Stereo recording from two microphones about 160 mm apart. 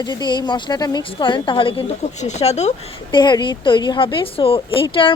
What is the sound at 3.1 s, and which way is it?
A woman's voice, 30° left (ahead or behind).